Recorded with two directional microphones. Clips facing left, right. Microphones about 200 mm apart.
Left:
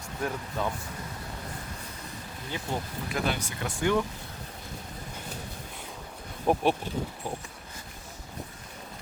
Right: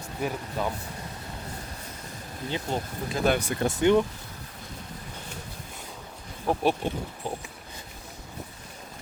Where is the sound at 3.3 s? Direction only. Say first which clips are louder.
Right 7 dB; 60° right (ahead or behind).